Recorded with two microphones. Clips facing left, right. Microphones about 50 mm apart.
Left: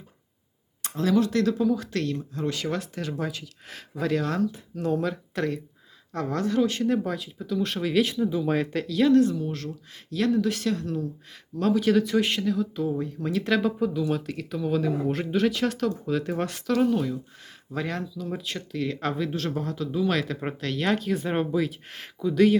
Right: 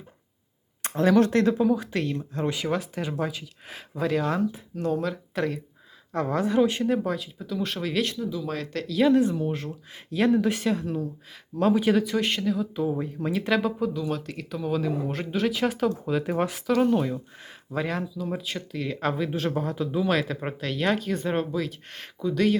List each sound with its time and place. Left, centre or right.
0.8 s a sound: right
1.2 s speech: right
2.1 s speech: right
2.5 s speech: centre
6.9 s speech: centre
8.2 s speech: left
8.7 s speech: centre
9.0 s speech: centre
9.3 s speech: right
11.9 s speech: centre
12.7 s speech: centre